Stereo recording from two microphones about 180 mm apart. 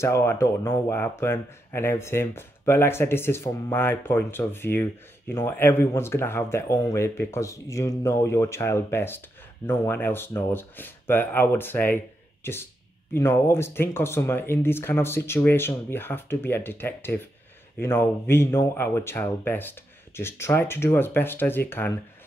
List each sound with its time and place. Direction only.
0.0 s speech: 15° left (ahead or behind)